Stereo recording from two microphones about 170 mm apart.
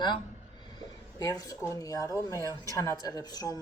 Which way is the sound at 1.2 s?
20° left (ahead or behind).